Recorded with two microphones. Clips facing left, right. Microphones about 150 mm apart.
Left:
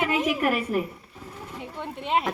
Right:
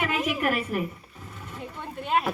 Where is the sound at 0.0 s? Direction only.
25° left (ahead or behind).